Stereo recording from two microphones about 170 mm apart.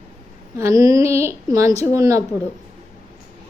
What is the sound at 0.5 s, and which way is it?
A woman's voice, 15° right (ahead or behind).